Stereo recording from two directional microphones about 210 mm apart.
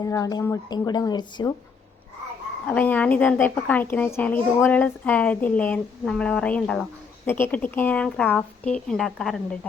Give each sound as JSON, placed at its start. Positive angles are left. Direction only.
{"t": 0.0, "sound": "a woman's voice", "side_deg": 15}
{"t": 2.6, "sound": "a woman's voice", "side_deg": 5}